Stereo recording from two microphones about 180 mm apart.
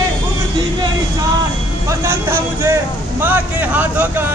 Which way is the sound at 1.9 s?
15° right (ahead or behind).